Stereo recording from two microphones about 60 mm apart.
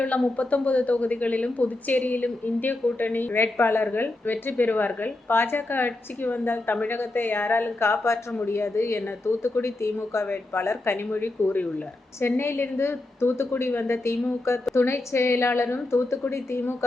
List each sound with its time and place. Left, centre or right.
0.3 s a woman's voice: left
3.3 s a woman's voice: left
7.8 s speech: left
11.1 s a woman's voice: left